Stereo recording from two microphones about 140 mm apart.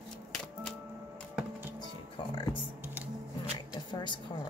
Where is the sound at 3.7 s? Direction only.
35° left (ahead or behind).